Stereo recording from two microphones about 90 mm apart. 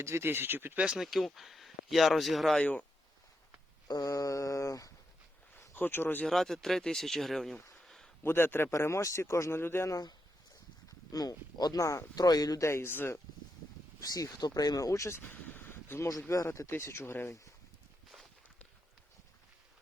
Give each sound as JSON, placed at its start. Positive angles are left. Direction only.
{"t": 0.0, "sound": "speech", "side_deg": -30}
{"t": 0.8, "sound": "speech", "side_deg": -10}
{"t": 2.6, "sound": "speech", "side_deg": 15}
{"t": 3.8, "sound": "mantra", "side_deg": 45}
{"t": 5.7, "sound": "speech", "side_deg": 20}
{"t": 6.2, "sound": "speech", "side_deg": 5}
{"t": 7.9, "sound": "a sound", "side_deg": 5}
{"t": 8.2, "sound": "speech", "side_deg": 25}
{"t": 10.8, "sound": "speech", "side_deg": 45}
{"t": 12.6, "sound": "speech", "side_deg": 25}
{"t": 14.0, "sound": "speech", "side_deg": 45}